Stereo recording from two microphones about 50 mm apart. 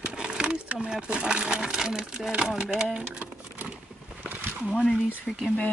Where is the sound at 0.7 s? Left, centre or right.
Centre.